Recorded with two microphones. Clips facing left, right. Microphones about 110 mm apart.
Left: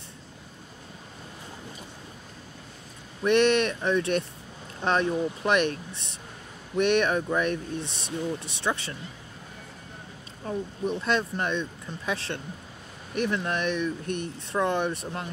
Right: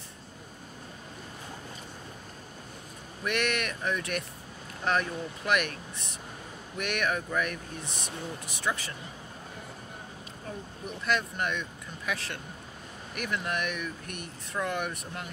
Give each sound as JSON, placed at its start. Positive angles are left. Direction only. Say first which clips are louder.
{"t": 3.3, "sound": "speech", "louder": "left 9 dB", "side_deg": 30}
{"t": 10.4, "sound": "speech", "louder": "left 10 dB", "side_deg": 30}